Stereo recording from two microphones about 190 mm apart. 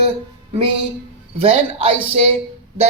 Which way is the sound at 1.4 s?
30° right (ahead or behind).